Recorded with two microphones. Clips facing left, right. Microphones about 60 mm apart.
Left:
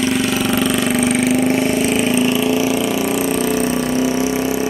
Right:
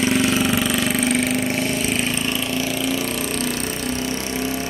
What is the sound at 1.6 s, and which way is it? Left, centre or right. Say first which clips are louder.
Engine: left 6 dB; centre.